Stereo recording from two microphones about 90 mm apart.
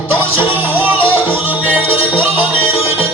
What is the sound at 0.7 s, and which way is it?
Music, 20° right (ahead or behind).